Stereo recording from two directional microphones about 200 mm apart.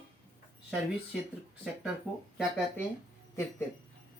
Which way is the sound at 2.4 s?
5° left (ahead or behind).